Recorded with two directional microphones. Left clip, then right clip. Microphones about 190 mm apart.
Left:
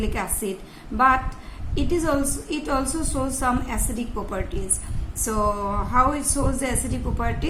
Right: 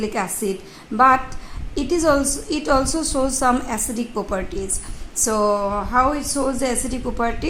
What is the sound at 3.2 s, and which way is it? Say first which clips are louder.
A woman's voice: right 5 dB; 50° right (ahead or behind).